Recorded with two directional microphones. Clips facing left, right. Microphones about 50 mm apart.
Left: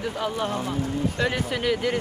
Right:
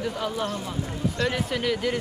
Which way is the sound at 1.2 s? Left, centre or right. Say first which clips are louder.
Right 2 dB; centre.